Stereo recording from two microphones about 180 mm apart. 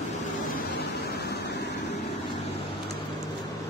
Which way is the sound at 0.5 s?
65° left (ahead or behind).